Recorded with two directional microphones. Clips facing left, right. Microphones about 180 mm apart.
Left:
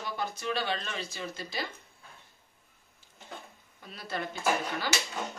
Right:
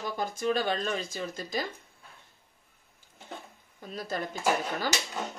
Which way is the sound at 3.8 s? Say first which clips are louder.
Right 3 dB; 40° right (ahead or behind).